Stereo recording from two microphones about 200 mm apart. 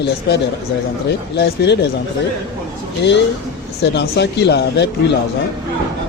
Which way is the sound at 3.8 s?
60° left (ahead or behind).